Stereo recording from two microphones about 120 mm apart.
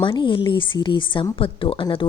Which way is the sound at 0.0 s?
45° left (ahead or behind).